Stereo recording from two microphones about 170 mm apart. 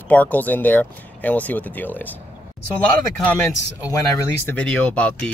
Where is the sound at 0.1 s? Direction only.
10° left (ahead or behind).